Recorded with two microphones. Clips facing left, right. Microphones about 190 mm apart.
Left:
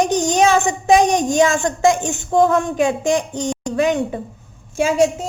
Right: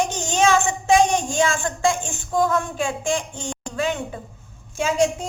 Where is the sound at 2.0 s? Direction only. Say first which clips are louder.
Left 8 dB; 70° left (ahead or behind).